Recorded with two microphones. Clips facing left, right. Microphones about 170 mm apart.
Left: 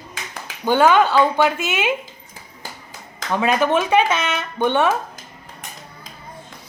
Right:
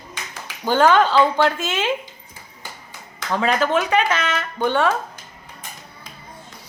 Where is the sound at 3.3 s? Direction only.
15° left (ahead or behind).